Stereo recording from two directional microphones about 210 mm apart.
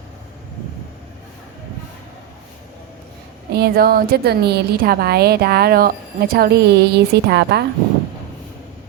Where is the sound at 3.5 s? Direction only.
45° right (ahead or behind).